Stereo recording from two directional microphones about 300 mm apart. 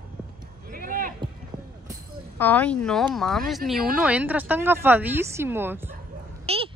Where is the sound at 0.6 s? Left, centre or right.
Right.